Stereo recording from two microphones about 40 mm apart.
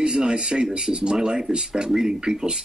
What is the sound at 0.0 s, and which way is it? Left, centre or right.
A man's voice, right.